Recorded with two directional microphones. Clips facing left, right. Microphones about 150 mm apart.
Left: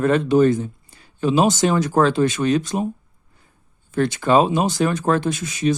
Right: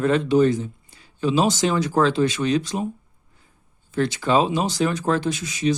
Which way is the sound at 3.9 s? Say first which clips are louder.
Left 3 dB; 50° left (ahead or behind).